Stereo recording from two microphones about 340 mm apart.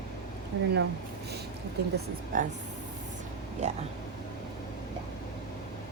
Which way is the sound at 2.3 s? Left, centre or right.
Right.